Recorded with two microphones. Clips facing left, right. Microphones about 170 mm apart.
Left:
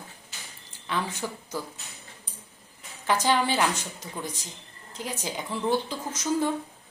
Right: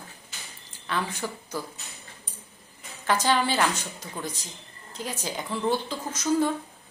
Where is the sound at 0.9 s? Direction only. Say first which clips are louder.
Even; 15° left (ahead or behind).